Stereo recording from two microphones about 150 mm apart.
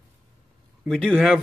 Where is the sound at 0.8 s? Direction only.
5° left (ahead or behind).